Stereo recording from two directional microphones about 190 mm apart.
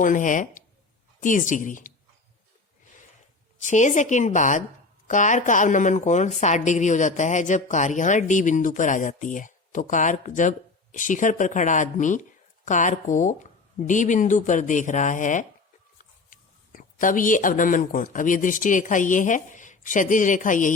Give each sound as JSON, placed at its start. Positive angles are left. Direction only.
{"t": 0.0, "sound": "a woman's voice", "side_deg": 45}
{"t": 3.6, "sound": "speech", "side_deg": 40}